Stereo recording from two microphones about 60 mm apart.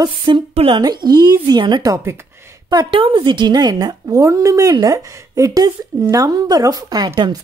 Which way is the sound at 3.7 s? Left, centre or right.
Right.